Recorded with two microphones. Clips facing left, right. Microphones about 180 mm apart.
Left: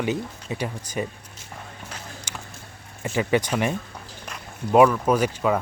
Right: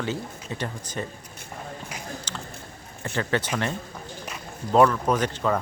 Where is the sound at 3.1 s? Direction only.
10° left (ahead or behind).